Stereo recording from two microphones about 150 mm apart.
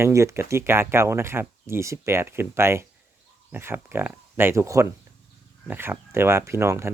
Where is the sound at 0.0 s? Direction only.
20° right (ahead or behind).